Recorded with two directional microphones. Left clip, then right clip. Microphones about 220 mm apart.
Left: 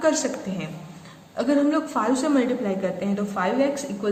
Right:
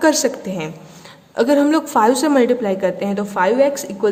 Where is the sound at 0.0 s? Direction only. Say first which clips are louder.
Right 7 dB; 50° right (ahead or behind).